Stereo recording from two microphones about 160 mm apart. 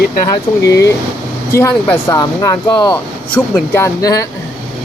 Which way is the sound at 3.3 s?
10° left (ahead or behind).